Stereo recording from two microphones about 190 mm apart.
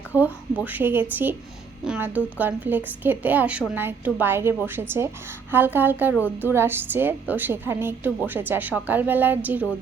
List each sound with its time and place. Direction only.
0.1 s a woman's voice: 10° right (ahead or behind)